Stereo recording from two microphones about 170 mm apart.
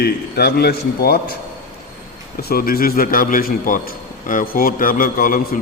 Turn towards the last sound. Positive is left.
turn(degrees=55)  # may be behind; listen again after turning